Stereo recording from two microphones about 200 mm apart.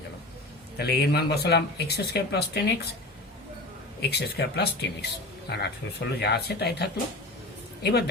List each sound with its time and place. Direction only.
0.8 s speech: 55° left (ahead or behind)
4.0 s speech: 55° left (ahead or behind)